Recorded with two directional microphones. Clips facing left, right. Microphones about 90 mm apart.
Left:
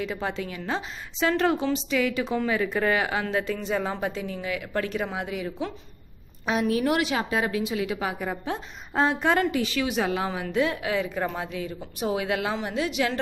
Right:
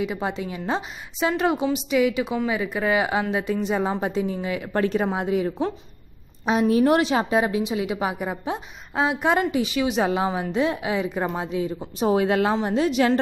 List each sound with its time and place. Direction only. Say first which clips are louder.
0.0 s a woman's voice: right 3 dB; 15° right (ahead or behind); by 13.2 s 40° right (ahead or behind)